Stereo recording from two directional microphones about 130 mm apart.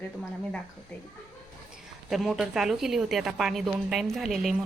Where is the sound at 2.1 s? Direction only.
Centre (ahead or behind).